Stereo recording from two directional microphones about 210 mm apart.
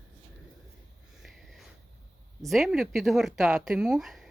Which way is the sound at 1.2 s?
Centre (ahead or behind).